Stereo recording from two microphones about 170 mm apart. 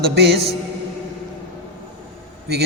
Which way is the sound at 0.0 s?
70° right (ahead or behind).